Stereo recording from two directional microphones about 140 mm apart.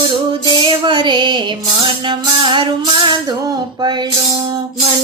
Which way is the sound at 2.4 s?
35° right (ahead or behind).